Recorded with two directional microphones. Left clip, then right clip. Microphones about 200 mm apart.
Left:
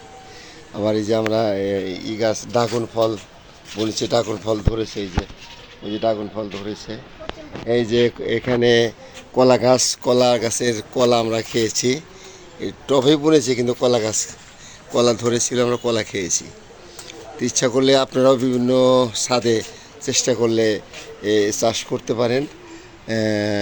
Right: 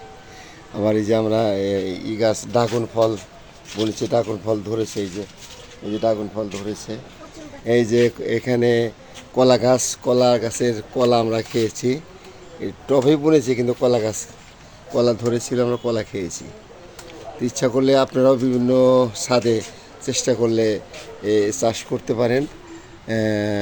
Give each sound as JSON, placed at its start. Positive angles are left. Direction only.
{"t": 0.7, "sound": "speech", "side_deg": -5}
{"t": 6.1, "sound": "speech", "side_deg": 10}
{"t": 6.6, "sound": "speech", "side_deg": -10}